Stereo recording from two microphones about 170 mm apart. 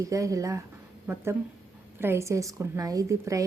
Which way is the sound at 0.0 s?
20° right (ahead or behind).